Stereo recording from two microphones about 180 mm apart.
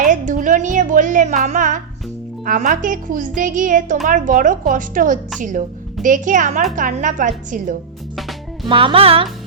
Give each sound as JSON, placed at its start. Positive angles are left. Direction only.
{"t": 0.0, "sound": "music", "side_deg": -45}
{"t": 2.4, "sound": "a woman's voice", "side_deg": -50}
{"t": 8.6, "sound": "music", "side_deg": -30}